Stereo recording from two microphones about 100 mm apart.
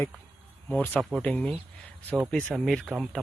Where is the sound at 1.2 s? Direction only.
10° left (ahead or behind).